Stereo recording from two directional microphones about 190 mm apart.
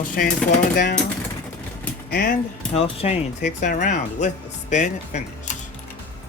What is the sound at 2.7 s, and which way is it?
Speech, 30° left (ahead or behind).